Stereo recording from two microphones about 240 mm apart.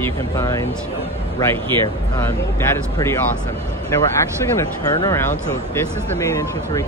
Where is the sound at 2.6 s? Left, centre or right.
Centre.